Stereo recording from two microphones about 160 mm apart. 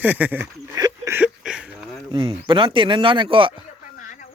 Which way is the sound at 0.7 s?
25° right (ahead or behind).